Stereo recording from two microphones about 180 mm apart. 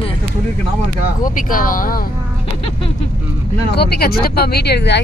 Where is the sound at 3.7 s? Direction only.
60° left (ahead or behind).